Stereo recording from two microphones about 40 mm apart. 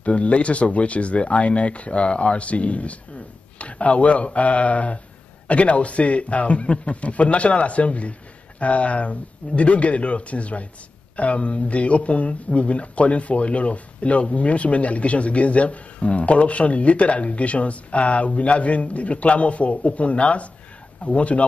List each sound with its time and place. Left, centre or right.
0.0 s a man's voice: left